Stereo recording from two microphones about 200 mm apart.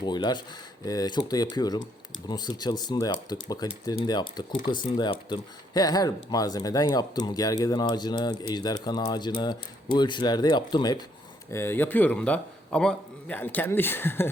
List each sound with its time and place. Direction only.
0.0 s speech: 20° left (ahead or behind)
11.5 s a man's voice: 10° left (ahead or behind)